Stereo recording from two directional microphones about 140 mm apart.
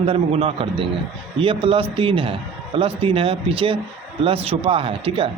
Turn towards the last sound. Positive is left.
turn(degrees=-40)  # may be behind; listen again after turning